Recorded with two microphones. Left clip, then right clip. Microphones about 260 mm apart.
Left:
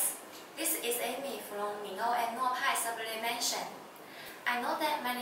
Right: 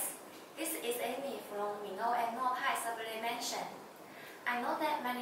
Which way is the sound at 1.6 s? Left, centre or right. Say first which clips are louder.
Left 2 dB; centre.